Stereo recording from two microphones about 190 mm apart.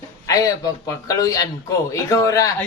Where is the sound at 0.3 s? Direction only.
20° left (ahead or behind).